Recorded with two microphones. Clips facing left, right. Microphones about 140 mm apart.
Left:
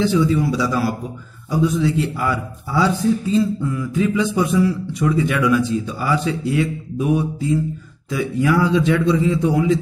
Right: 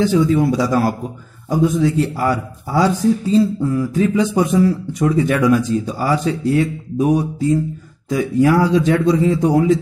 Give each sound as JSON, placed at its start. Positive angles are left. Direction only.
{"t": 0.0, "sound": "a man's voice", "side_deg": -45}